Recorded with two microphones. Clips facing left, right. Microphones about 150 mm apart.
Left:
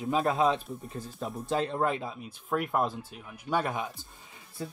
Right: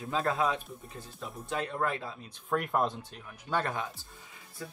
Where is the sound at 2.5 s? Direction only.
5° left (ahead or behind).